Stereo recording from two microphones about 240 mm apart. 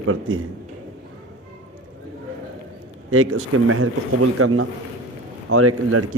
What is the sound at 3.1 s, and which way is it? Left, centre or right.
Speech, right.